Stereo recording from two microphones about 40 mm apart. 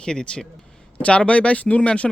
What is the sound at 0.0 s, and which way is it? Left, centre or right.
Speech, left.